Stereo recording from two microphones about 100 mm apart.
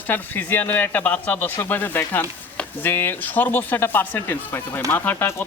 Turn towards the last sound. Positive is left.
turn(degrees=25)  # may be behind; listen again after turning